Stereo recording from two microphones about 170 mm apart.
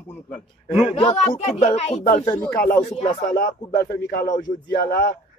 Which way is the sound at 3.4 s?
55° left (ahead or behind).